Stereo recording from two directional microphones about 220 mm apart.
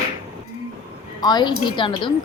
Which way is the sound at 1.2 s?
20° left (ahead or behind).